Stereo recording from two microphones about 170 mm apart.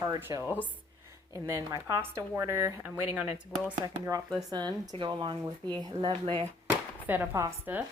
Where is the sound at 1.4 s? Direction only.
20° right (ahead or behind).